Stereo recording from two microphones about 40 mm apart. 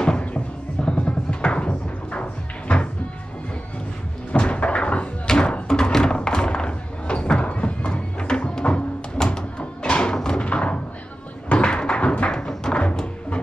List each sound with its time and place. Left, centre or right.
0.8 s music: left
4.3 s slam: left
5.2 s music: centre
5.5 s a sound: centre
9.6 s music: left
10.4 s a sound: left
11.4 s music: left